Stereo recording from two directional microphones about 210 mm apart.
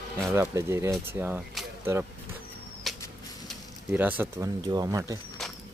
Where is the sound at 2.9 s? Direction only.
Centre (ahead or behind).